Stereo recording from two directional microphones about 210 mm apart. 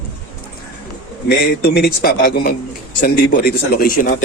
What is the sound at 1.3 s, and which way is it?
Speech, 50° left (ahead or behind).